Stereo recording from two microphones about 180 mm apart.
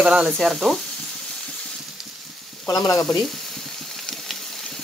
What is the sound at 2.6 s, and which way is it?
Sizzle, 20° left (ahead or behind).